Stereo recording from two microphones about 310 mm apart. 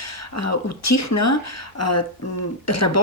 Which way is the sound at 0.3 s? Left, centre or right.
Left.